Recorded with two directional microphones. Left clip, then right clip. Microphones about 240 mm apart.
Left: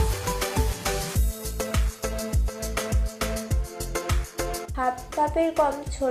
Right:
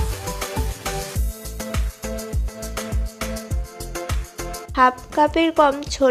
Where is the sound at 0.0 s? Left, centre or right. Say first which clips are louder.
Left 1 dB; centre.